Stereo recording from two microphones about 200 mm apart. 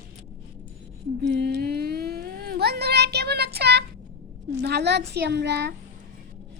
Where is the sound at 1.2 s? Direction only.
60° right (ahead or behind).